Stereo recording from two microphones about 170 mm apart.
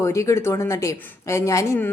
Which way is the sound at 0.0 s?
15° left (ahead or behind).